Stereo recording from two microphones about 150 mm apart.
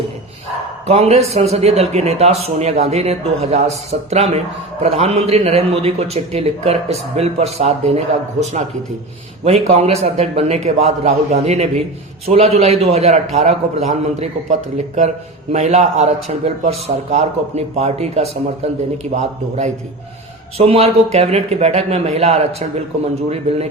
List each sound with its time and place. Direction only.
0.9 s a man's voice: 45° right (ahead or behind)